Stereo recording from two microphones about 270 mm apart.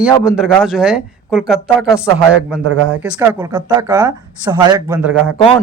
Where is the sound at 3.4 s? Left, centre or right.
Centre.